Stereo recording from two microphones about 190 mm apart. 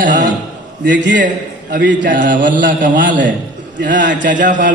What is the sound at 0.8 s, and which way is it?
Speech, 70° right (ahead or behind).